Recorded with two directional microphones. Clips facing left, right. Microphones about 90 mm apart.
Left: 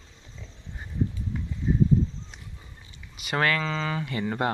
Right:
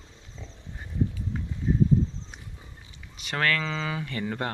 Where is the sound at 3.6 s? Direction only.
Centre (ahead or behind).